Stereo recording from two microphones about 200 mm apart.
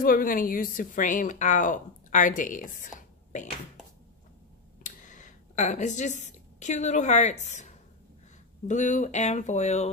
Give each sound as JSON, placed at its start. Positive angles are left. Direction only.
{"t": 0.0, "sound": "speech", "side_deg": 45}
{"t": 4.8, "sound": "a sound", "side_deg": 40}
{"t": 6.2, "sound": "speech", "side_deg": 35}